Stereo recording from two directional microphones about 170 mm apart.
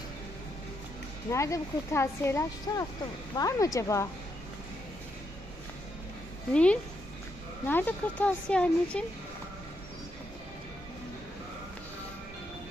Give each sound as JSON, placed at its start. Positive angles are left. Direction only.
{"t": 1.3, "sound": "speech", "side_deg": 20}
{"t": 6.5, "sound": "speech", "side_deg": 5}